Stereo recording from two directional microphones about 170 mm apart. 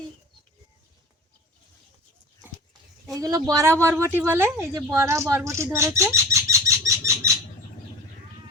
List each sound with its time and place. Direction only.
3.2 s a woman's voice: 20° right (ahead or behind)